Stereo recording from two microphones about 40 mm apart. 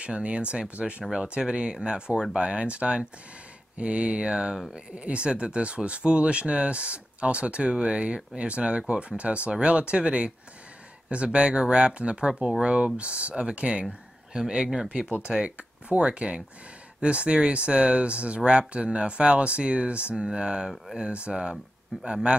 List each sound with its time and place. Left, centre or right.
0.0 s speech: right
14.9 s speech: right